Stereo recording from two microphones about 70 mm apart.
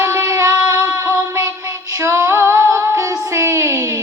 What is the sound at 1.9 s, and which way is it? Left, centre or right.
Female singing, right.